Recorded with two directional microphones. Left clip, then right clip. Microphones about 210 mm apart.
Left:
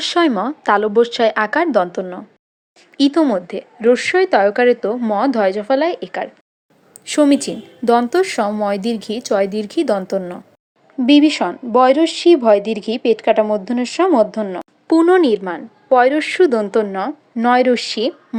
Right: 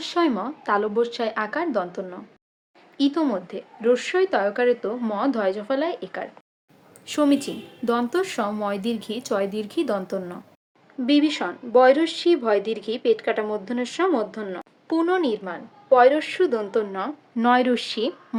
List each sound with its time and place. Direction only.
0.0 s a woman's voice: 35° left (ahead or behind)